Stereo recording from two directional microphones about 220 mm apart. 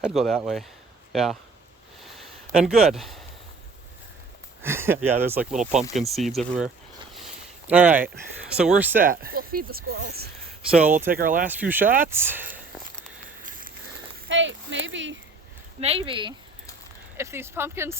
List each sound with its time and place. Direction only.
0.0 s speech: centre (ahead or behind)
2.0 s a sound: centre (ahead or behind)
4.6 s speech: 10° right (ahead or behind)
7.7 s speech: 5° right (ahead or behind)
9.0 s speech: 40° right (ahead or behind)
11.4 s speech: 10° right (ahead or behind)
13.4 s a sound: 40° right (ahead or behind)
14.3 s a sound: 55° right (ahead or behind)
15.8 s speech: 25° right (ahead or behind)
17.2 s speech: 10° right (ahead or behind)